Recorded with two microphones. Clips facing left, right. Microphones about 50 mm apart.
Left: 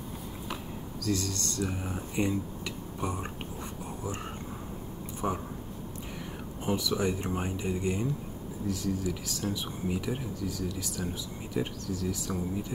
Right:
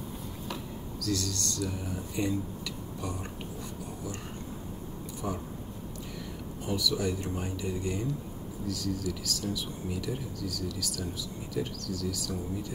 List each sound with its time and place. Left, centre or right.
1.0 s speech: left
5.2 s speech: left
6.6 s speech: left